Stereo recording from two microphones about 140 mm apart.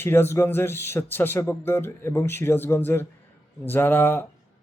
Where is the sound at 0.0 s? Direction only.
15° left (ahead or behind).